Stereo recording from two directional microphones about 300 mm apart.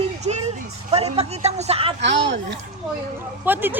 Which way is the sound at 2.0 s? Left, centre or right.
Right.